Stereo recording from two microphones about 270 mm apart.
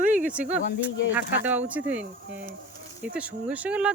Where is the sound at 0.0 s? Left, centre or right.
Right.